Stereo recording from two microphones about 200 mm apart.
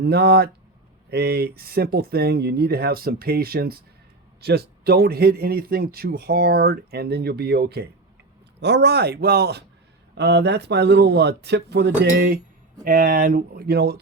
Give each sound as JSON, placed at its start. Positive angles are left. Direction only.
{"t": 0.0, "sound": "a man's voice", "side_deg": -55}
{"t": 12.8, "sound": "a man's voice", "side_deg": -45}